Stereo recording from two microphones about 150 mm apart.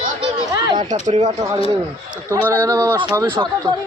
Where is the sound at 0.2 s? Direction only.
25° right (ahead or behind).